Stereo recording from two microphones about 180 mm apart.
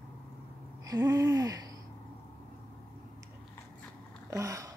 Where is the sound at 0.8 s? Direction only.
20° right (ahead or behind).